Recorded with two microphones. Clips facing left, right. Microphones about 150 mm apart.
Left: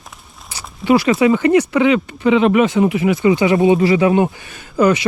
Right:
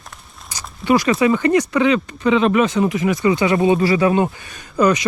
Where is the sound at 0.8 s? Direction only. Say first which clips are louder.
Left 2 dB; 25° left (ahead or behind).